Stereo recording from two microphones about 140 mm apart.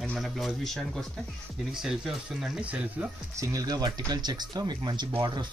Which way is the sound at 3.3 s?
25° right (ahead or behind).